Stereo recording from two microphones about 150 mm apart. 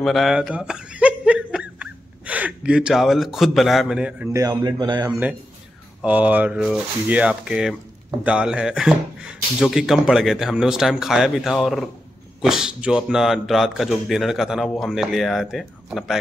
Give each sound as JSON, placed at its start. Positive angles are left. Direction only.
{"t": 0.0, "sound": "speech", "side_deg": 0}
{"t": 4.3, "sound": "a man's voice", "side_deg": -25}
{"t": 6.0, "sound": "speech", "side_deg": -10}